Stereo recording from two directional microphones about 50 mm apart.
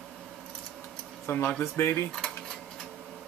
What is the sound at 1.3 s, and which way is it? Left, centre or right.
Speech, left.